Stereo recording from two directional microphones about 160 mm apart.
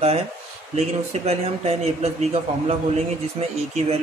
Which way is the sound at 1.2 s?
40° right (ahead or behind).